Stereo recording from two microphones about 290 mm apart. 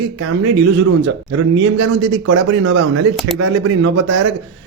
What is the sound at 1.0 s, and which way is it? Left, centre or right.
Speech, right.